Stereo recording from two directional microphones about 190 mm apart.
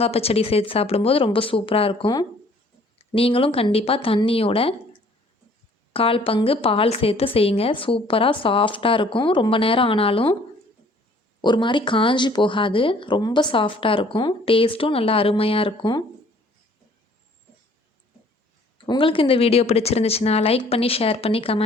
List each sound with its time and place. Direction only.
0.0 s speech: 30° left (ahead or behind)
11.4 s speech: 25° left (ahead or behind)
18.9 s speech: 25° left (ahead or behind)